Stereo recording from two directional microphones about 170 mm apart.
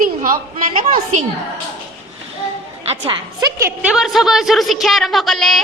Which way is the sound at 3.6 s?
5° right (ahead or behind).